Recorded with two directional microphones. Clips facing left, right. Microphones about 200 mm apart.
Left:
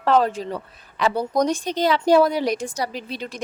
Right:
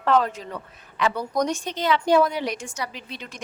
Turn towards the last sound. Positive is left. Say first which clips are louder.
# left 6 dB
turn(degrees=35)  # may be behind; listen again after turning